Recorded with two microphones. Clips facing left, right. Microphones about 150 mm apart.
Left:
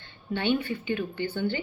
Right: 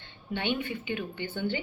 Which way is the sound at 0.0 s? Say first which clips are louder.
Left 4 dB; 20° right (ahead or behind).